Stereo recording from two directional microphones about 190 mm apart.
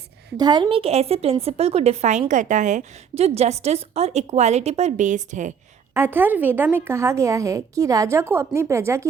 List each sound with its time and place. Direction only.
0.3 s a woman's voice: 20° right (ahead or behind); by 5.5 s 40° right (ahead or behind)
5.9 s a woman's voice: 10° right (ahead or behind)